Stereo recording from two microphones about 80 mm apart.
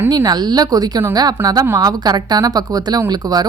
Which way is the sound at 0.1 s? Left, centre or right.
Right.